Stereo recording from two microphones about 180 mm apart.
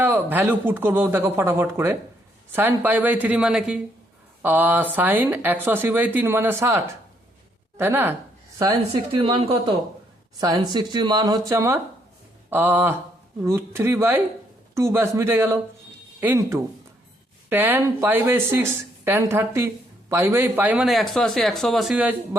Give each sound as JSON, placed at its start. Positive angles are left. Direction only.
{"t": 0.0, "sound": "speech", "side_deg": -10}
{"t": 8.9, "sound": "a woman's voice", "side_deg": -30}